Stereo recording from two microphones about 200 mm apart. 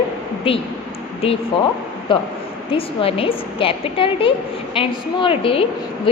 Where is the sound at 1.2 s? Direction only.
30° left (ahead or behind).